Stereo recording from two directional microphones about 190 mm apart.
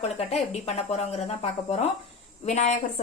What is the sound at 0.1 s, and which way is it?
Speech, 35° left (ahead or behind).